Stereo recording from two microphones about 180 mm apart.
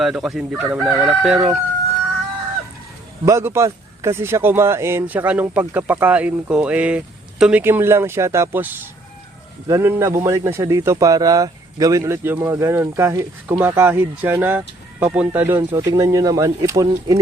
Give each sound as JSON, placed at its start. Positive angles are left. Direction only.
{"t": 0.0, "sound": "speech", "side_deg": 0}
{"t": 3.2, "sound": "speech", "side_deg": -15}